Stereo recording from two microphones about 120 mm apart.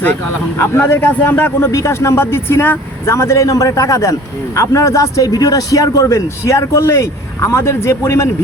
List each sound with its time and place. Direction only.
0.6 s a man's voice: 20° left (ahead or behind)